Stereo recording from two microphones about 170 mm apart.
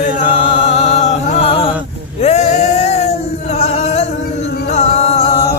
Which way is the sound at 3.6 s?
40° left (ahead or behind).